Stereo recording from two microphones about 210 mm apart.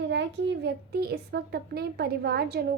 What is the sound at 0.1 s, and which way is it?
Speech, 55° right (ahead or behind).